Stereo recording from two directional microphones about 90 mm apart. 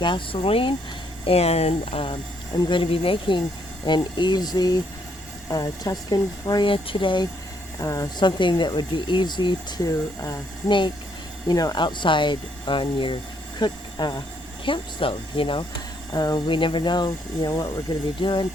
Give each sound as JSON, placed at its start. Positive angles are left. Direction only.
{"t": 0.0, "sound": "speech", "side_deg": 70}
{"t": 2.6, "sound": "speech", "side_deg": 60}
{"t": 3.8, "sound": "speech", "side_deg": 55}
{"t": 6.7, "sound": "speech", "side_deg": 75}
{"t": 7.8, "sound": "speech", "side_deg": 35}
{"t": 8.2, "sound": "speech", "side_deg": 60}
{"t": 10.7, "sound": "speech", "side_deg": 65}
{"t": 11.4, "sound": "speech", "side_deg": 45}
{"t": 13.6, "sound": "speech", "side_deg": 55}
{"t": 14.6, "sound": "speech", "side_deg": 70}
{"t": 16.1, "sound": "speech", "side_deg": 50}
{"t": 18.2, "sound": "speech", "side_deg": 65}